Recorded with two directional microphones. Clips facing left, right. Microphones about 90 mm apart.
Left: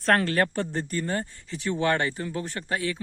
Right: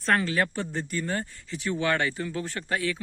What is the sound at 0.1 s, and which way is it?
A man's voice, 50° left (ahead or behind).